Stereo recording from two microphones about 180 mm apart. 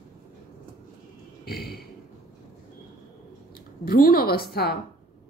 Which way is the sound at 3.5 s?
55° left (ahead or behind).